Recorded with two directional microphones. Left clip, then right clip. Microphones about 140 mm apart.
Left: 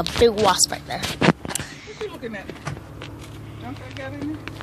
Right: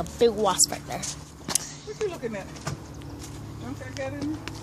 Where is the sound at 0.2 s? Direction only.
15° left (ahead or behind).